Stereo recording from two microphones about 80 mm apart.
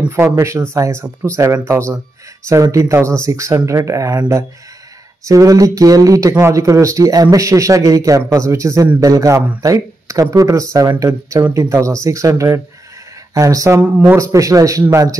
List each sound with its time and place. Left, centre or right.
0.1 s speech: right